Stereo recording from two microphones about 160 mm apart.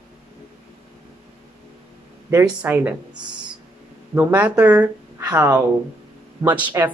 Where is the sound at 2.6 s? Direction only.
10° right (ahead or behind).